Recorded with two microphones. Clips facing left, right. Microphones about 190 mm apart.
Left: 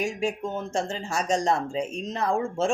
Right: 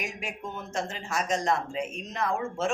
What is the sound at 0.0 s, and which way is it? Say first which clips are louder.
A woman's voice: left 9 dB; 30° left (ahead or behind).